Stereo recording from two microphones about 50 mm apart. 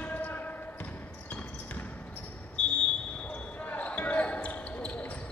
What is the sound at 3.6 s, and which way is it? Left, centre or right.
Basketball bounce, left.